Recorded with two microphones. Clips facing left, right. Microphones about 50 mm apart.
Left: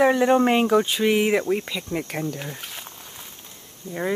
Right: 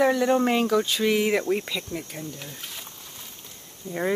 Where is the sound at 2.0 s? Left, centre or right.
Left.